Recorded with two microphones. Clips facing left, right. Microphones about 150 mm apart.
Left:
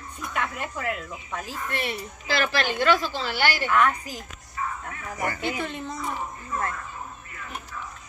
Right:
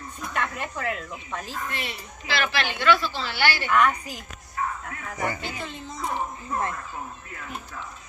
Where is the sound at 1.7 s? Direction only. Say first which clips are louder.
Left 4 dB; 55° left (ahead or behind).